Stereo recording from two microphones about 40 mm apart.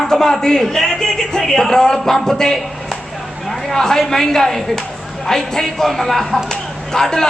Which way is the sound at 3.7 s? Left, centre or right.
Centre.